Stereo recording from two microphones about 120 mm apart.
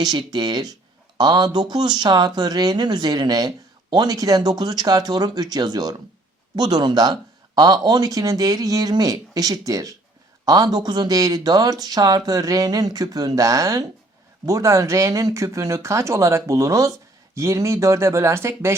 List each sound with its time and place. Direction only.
0.0 s speech: 35° right (ahead or behind); by 18.7 s 20° right (ahead or behind)